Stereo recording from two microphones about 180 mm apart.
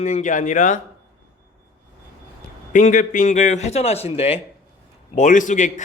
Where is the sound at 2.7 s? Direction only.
45° left (ahead or behind).